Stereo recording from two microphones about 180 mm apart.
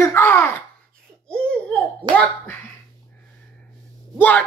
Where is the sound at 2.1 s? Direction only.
25° right (ahead or behind).